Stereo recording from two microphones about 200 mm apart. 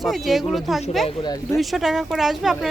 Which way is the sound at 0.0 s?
Centre (ahead or behind).